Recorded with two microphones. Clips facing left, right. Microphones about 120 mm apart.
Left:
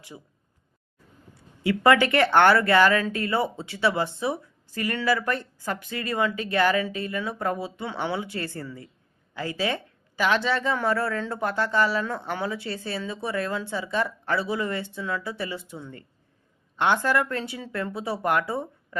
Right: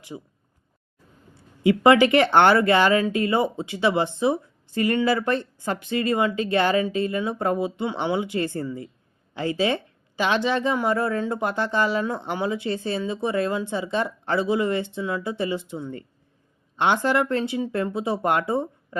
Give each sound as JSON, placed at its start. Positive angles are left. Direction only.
{"t": 0.1, "sound": "speech", "side_deg": -30}
{"t": 1.6, "sound": "speech", "side_deg": -20}